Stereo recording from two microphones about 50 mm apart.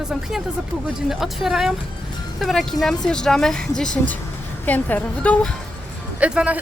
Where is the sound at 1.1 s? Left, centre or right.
Centre.